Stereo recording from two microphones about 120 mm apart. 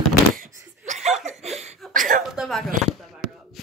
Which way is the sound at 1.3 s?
65° right (ahead or behind).